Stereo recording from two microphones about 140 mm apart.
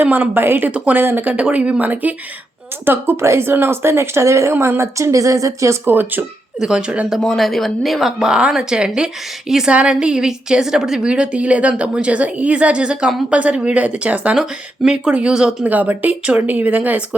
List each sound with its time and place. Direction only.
0.0 s a woman's voice: 15° right (ahead or behind)
7.2 s a woman's voice: centre (ahead or behind)